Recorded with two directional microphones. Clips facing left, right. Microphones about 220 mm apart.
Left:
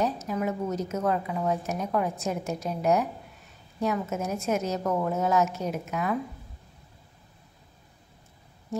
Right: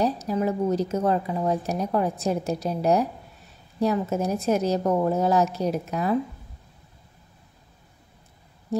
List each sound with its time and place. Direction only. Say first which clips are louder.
0.0 s speech: right 4 dB; 35° right (ahead or behind)